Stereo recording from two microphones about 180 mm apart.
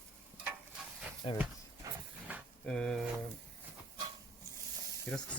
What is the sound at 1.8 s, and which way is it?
Vehicle, 20° right (ahead or behind).